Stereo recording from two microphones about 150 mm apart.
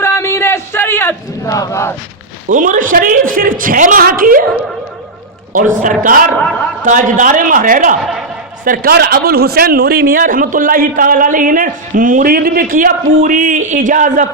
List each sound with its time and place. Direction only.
0.0 s battle cry: 15° left (ahead or behind)
2.5 s a woman's voice: 60° right (ahead or behind)
5.5 s a man's voice: 60° right (ahead or behind)
8.6 s a man's voice: 85° right; by 14.3 s 60° right (ahead or behind)